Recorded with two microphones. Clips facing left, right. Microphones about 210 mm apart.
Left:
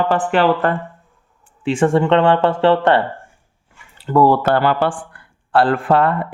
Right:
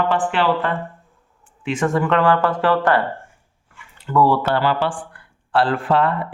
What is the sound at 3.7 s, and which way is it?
Speech, 35° left (ahead or behind).